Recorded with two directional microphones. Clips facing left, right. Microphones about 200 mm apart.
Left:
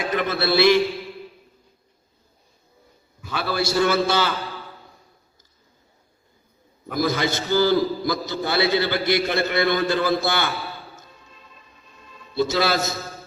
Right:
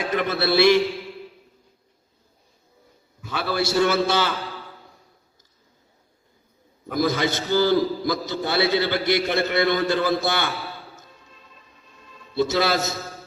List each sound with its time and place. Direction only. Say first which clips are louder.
0.2 s a man's voice: even; 30° right (ahead or behind)
3.3 s a man's voice: even; 25° right (ahead or behind)
6.9 s a man's voice: even; 20° right (ahead or behind)
12.3 s a man's voice: even; 20° right (ahead or behind)